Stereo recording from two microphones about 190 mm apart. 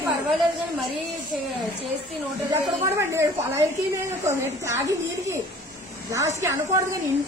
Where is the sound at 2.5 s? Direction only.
15° right (ahead or behind).